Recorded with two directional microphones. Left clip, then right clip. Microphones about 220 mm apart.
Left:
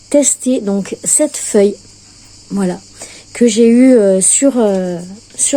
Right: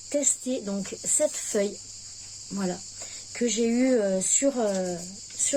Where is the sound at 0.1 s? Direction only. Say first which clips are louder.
Left 15 dB; 45° left (ahead or behind).